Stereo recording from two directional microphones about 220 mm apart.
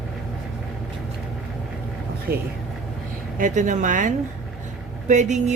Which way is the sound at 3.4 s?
35° right (ahead or behind).